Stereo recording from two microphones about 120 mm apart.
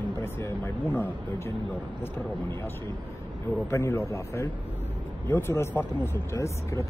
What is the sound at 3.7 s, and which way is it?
Speech, 20° left (ahead or behind).